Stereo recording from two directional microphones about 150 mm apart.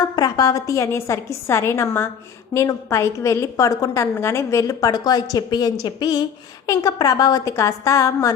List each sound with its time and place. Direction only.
0.2 s a woman's voice: 25° left (ahead or behind)